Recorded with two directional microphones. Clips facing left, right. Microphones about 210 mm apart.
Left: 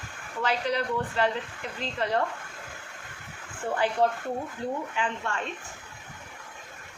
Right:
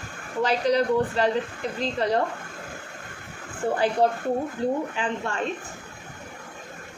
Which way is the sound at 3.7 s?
40° right (ahead or behind).